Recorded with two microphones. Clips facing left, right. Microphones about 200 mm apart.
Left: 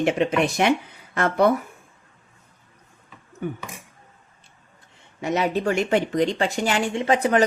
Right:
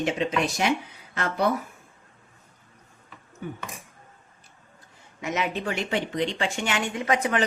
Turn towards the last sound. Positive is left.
turn(degrees=35)  # may be behind; listen again after turning